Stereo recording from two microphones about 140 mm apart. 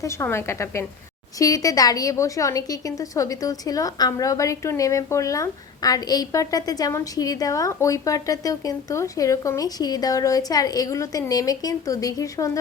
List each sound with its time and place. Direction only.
0.0 s a woman's voice: 20° left (ahead or behind)